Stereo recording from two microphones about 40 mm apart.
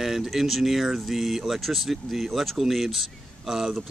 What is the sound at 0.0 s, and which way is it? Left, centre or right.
Speech, centre.